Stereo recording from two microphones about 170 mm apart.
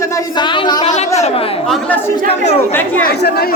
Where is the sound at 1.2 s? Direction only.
40° left (ahead or behind).